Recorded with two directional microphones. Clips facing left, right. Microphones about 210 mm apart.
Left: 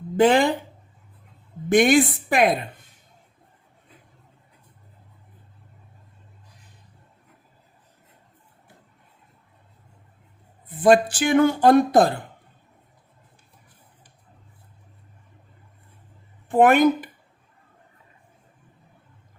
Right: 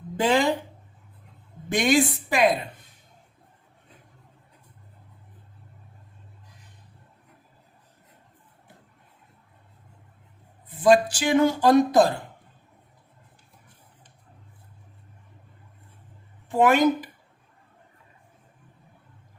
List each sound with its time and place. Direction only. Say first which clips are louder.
0.2 s speech: left 5 dB; 55° left (ahead or behind)
1.7 s speech: left 5 dB; 55° left (ahead or behind)
10.8 s speech: left 2 dB; 55° left (ahead or behind)
16.5 s speech: left 3 dB; 55° left (ahead or behind)